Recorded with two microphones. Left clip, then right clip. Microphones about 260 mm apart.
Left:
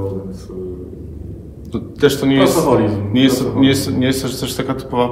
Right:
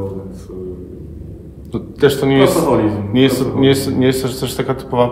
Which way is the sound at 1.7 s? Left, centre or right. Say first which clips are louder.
Right 1 dB; right.